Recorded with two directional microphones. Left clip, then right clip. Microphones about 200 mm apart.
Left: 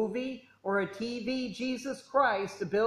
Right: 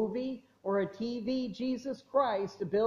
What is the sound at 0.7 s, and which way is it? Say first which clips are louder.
A man's voice: left 1 dB; centre (ahead or behind).